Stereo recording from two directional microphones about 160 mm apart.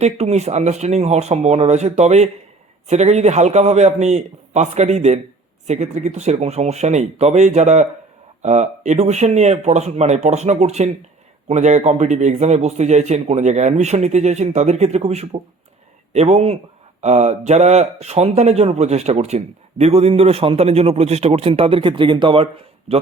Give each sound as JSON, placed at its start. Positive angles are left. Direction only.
{"t": 0.0, "sound": "a man's voice", "side_deg": -45}